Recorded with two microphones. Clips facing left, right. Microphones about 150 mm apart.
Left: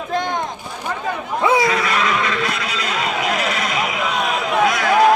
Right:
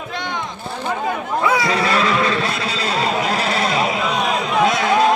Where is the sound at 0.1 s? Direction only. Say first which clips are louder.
Left 6 dB; 45° left (ahead or behind).